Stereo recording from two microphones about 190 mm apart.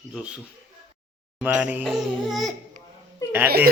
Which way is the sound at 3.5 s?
55° right (ahead or behind).